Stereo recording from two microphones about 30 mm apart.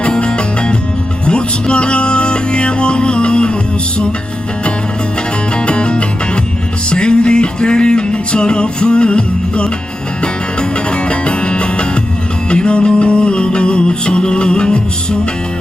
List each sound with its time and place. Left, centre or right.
0.0 s music: left
5.5 s music: left